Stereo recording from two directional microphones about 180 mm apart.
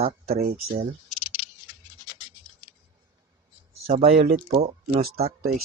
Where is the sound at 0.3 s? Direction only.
50° right (ahead or behind).